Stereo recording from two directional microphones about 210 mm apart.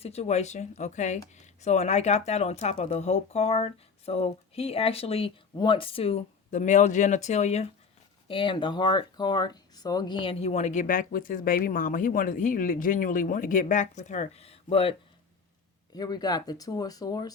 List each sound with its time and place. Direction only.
0.0 s speech: 30° left (ahead or behind)
16.0 s speech: 20° left (ahead or behind)